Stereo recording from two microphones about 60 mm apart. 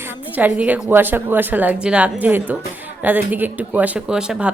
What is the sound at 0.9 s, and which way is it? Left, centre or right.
Speech, right.